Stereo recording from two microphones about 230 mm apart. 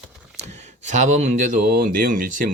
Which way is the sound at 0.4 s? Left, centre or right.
Right.